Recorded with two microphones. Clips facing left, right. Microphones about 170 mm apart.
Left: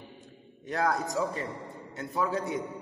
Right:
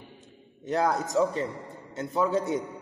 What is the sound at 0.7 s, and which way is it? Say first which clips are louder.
A man's voice: right 3 dB; 25° right (ahead or behind).